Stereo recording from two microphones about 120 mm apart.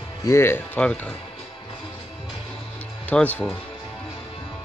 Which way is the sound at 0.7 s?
10° left (ahead or behind).